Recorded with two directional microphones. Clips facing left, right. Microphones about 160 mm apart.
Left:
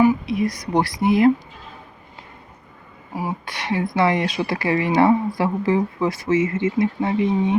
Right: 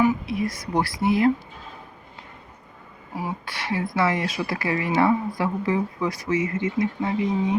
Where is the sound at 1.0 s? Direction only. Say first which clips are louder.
Left 4 dB; 15° left (ahead or behind).